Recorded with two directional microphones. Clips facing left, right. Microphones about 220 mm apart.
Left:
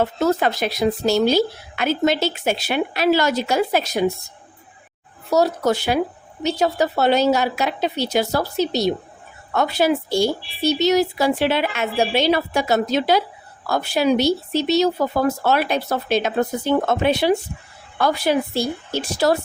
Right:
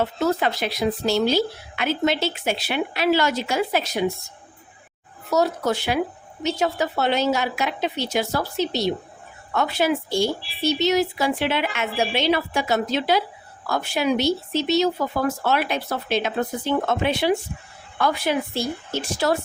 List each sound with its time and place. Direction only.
0.0 s a woman's voice: 45° left (ahead or behind)
5.3 s a woman's voice: 35° left (ahead or behind)